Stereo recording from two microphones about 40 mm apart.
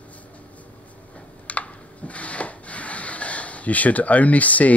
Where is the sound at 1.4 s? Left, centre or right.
Left.